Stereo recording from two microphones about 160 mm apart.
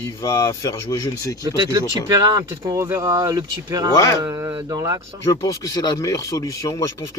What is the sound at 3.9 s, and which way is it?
Speech, 20° left (ahead or behind).